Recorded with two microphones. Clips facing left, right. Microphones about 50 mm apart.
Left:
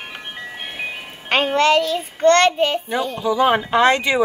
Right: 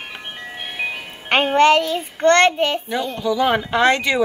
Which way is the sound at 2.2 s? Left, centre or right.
Right.